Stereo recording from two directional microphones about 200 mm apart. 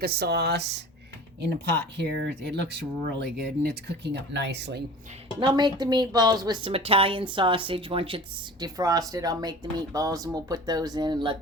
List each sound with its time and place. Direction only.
0.0 s speech: 50° right (ahead or behind)
5.4 s speech: 20° right (ahead or behind)